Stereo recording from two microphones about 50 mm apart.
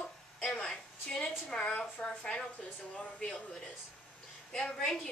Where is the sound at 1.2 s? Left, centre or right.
Left.